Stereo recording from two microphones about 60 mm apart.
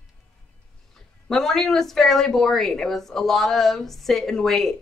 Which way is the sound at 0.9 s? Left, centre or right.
Centre.